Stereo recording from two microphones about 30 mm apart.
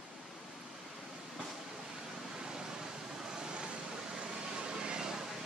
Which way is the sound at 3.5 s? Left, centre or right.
Right.